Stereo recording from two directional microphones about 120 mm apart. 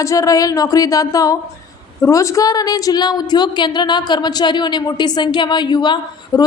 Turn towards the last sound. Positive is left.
turn(degrees=35)  # may be behind; listen again after turning